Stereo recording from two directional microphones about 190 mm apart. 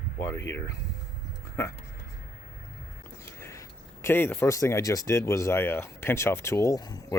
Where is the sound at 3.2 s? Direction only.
15° left (ahead or behind).